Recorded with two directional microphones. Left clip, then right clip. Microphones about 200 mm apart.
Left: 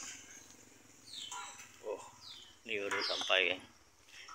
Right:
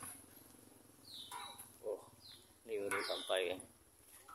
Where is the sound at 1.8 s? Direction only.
5° left (ahead or behind).